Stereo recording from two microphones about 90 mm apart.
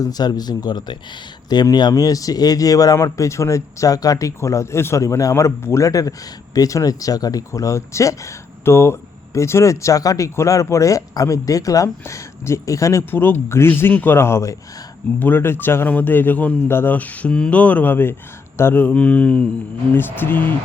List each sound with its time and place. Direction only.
0.0 s speech: 50° left (ahead or behind); by 19.5 s 15° left (ahead or behind)
19.9 s speech: 25° left (ahead or behind)